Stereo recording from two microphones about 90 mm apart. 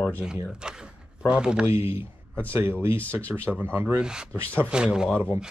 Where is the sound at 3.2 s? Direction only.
15° left (ahead or behind).